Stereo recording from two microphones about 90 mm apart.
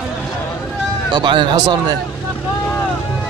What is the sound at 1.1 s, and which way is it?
Speech, 55° right (ahead or behind).